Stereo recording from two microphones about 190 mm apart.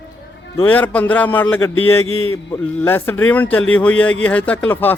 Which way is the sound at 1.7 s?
90° left.